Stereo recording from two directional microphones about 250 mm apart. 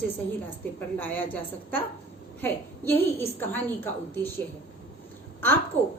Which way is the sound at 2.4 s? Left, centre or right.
Centre.